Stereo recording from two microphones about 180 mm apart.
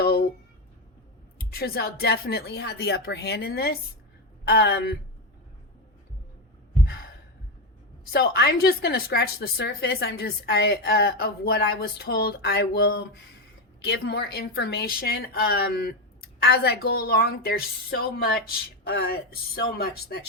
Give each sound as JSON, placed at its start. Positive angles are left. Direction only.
{"t": 0.0, "sound": "a sound", "side_deg": 60}
{"t": 1.5, "sound": "a woman's voice", "side_deg": 60}
{"t": 8.1, "sound": "a woman's voice", "side_deg": 60}